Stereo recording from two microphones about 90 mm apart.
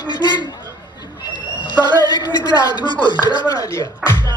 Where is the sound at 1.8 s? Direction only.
50° left (ahead or behind).